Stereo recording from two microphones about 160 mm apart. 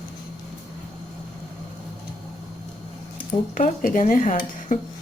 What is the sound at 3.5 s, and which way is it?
Speech, 55° left (ahead or behind).